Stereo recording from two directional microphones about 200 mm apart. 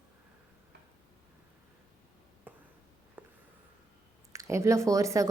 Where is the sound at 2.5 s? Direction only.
10° right (ahead or behind).